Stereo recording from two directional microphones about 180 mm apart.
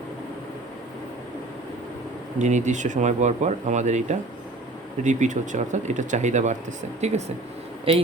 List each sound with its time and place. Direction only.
2.4 s speech: 40° right (ahead or behind)
7.9 s speech: 30° right (ahead or behind)